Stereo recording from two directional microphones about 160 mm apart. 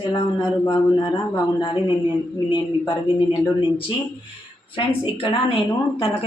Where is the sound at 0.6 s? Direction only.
25° left (ahead or behind).